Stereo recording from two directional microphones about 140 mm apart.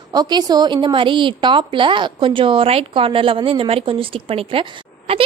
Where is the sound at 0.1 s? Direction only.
30° right (ahead or behind).